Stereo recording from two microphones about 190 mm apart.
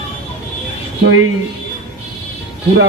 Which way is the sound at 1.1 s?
90° right.